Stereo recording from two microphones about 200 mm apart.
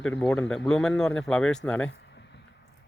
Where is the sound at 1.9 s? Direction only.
60° left (ahead or behind).